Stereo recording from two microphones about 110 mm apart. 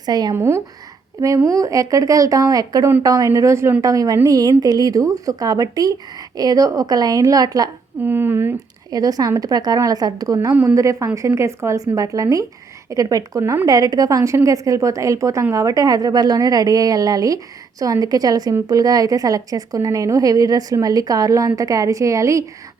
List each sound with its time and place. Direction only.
0.0 s a woman's voice: 35° right (ahead or behind)
0.3 s a woman's voice: 25° right (ahead or behind)
8.0 s a woman's voice: 20° right (ahead or behind)
8.9 s a woman's voice: 35° right (ahead or behind)
10.5 s speech: 15° right (ahead or behind)
10.8 s a woman's voice: 30° right (ahead or behind)